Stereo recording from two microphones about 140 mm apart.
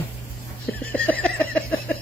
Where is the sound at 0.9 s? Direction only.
10° left (ahead or behind).